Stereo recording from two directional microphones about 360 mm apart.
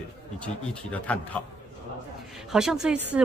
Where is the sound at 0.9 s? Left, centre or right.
Centre.